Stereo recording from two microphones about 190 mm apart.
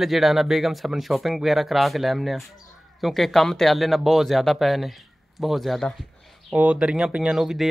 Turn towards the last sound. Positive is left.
turn(degrees=0)  # may be behind; listen again after turning